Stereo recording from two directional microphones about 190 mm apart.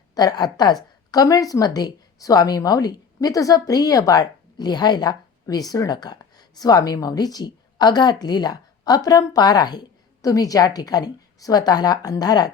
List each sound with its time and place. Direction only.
0.1 s a woman's voice: 20° left (ahead or behind)